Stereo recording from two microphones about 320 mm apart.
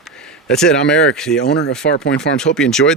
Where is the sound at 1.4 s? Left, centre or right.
Left.